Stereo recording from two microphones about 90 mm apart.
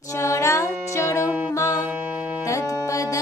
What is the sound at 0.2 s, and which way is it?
Music, 35° left (ahead or behind).